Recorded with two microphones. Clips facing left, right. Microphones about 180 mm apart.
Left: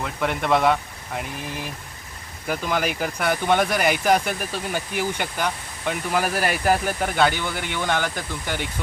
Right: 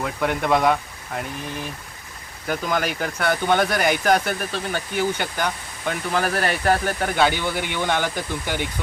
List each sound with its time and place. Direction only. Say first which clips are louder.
0.0 s speech: right 2 dB; centre (ahead or behind)